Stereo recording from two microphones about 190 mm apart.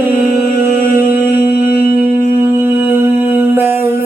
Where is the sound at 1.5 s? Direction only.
50° left (ahead or behind).